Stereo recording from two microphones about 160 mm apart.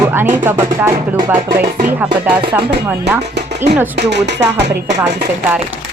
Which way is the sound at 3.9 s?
90° right.